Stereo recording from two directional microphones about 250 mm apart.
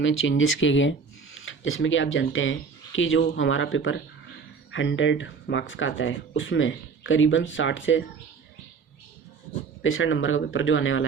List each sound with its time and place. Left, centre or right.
0.0 s speech: left
9.8 s speech: left